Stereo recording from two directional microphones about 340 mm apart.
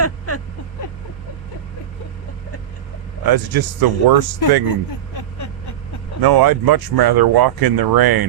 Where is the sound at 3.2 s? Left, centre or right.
Right.